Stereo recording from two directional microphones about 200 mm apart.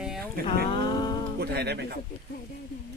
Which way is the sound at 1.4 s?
55° right (ahead or behind).